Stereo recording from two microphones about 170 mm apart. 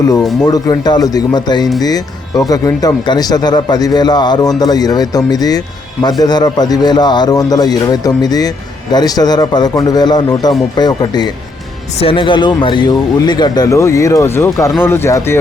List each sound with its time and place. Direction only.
0.4 s speech: 25° left (ahead or behind)